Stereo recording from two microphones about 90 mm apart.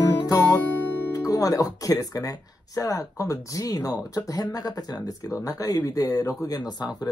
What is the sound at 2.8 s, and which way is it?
Speech, 40° left (ahead or behind).